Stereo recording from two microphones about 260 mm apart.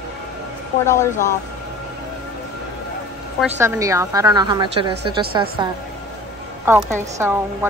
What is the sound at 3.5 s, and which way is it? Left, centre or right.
A woman's voice, centre.